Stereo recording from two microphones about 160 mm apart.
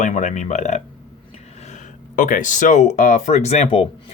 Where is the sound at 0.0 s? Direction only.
50° left (ahead or behind).